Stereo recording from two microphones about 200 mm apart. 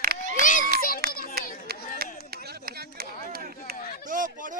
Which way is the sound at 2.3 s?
50° right (ahead or behind).